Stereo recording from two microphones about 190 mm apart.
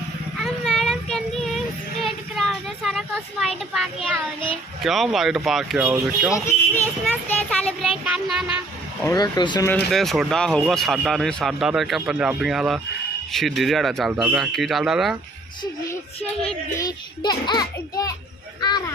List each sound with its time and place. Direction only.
0.3 s a sound: centre (ahead or behind)
4.8 s speech: centre (ahead or behind)
7.0 s speech: 5° left (ahead or behind)
9.0 s a child's voice: 20° left (ahead or behind)
9.6 s speech: 5° left (ahead or behind)
16.7 s a child's voice: 20° left (ahead or behind)